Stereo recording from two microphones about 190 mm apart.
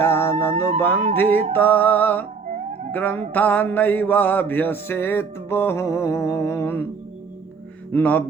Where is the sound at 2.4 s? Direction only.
40° right (ahead or behind).